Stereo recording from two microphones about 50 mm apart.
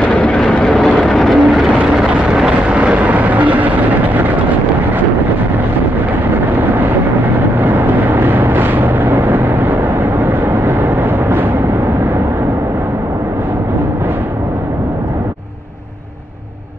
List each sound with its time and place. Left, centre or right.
0.1 s vehicle: left
0.7 s vehicle: centre
2.0 s vehicle: centre
7.6 s vehicle: right
10.8 s vehicle: right